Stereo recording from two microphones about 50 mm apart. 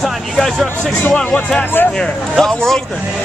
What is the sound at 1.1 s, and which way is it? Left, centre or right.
Speech, left.